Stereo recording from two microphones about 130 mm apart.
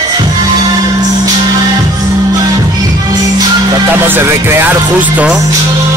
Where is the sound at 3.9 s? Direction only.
15° right (ahead or behind).